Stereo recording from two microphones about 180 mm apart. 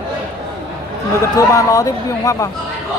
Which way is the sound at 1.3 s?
20° left (ahead or behind).